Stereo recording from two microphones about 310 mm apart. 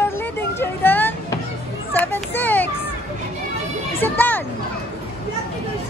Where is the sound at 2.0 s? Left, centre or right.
Centre.